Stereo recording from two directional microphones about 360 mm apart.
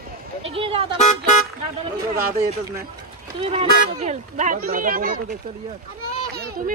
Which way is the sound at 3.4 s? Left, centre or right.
Centre.